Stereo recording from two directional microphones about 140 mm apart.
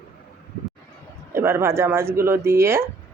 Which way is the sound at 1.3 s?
15° right (ahead or behind).